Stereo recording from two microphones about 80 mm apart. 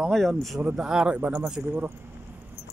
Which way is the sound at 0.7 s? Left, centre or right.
Centre.